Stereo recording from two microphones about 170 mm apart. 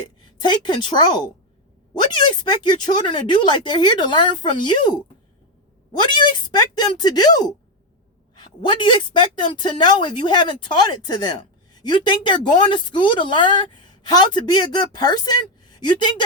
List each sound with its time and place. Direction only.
0.4 s speech: 25° left (ahead or behind)